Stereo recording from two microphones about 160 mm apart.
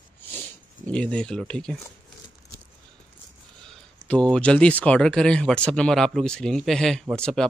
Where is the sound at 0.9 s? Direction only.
5° left (ahead or behind).